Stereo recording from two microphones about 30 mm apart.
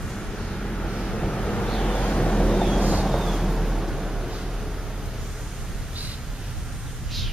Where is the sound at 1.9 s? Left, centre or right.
Left.